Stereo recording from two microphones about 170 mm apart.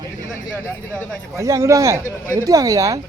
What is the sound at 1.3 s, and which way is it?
Speech, 15° right (ahead or behind).